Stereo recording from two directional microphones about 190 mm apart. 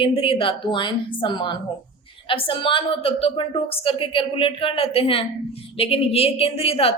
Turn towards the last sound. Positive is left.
turn(degrees=30)  # may be behind; listen again after turning